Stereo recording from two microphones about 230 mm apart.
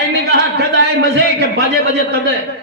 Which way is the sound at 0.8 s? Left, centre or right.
Right.